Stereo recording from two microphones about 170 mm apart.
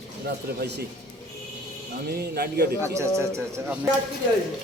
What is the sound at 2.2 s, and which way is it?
Speech, 70° right (ahead or behind).